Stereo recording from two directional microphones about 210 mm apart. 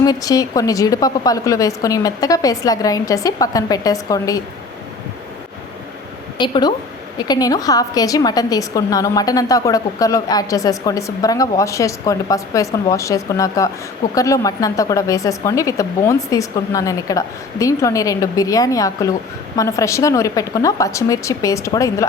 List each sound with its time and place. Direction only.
0.0 s a woman's voice: 15° left (ahead or behind)
6.3 s a woman's voice: 20° left (ahead or behind)